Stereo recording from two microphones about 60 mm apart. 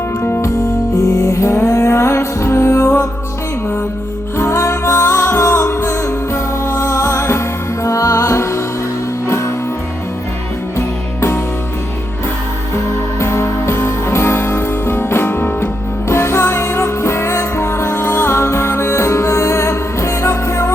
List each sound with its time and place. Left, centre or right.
0.2 s music: left
1.0 s music: left
4.4 s music: left
7.9 s music: left
10.8 s music: left
13.1 s music: left